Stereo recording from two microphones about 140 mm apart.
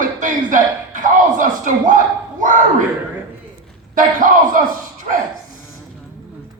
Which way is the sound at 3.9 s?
70° right (ahead or behind).